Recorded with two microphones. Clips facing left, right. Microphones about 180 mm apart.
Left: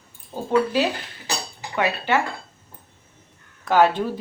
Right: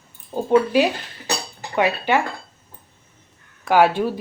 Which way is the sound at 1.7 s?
15° right (ahead or behind).